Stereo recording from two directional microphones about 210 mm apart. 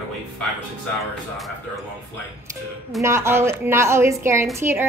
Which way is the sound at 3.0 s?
15° right (ahead or behind).